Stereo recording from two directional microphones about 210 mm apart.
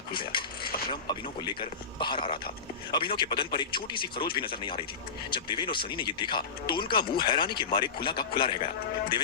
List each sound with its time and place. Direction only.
0.1 s mechanisms: 25° left (ahead or behind)
0.9 s speech: 20° left (ahead or behind)